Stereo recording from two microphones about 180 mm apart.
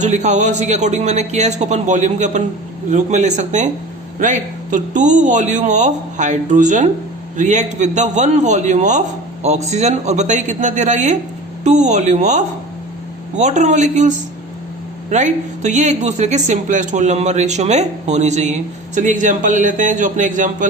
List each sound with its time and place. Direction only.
0.0 s a man's voice: 40° right (ahead or behind)